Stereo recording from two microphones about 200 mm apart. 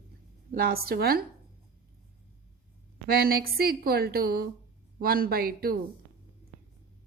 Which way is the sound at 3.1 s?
50° right (ahead or behind).